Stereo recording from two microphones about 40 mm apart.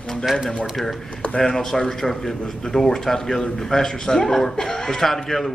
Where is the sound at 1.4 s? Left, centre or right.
Centre.